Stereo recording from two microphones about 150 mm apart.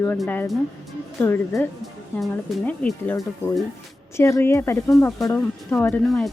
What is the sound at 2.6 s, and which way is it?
Speech, 10° left (ahead or behind).